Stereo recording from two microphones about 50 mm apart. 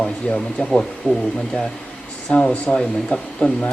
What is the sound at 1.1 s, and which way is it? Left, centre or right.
Speech, left.